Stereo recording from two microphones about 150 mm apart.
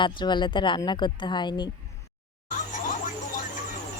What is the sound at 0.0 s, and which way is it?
A woman's voice, 30° left (ahead or behind).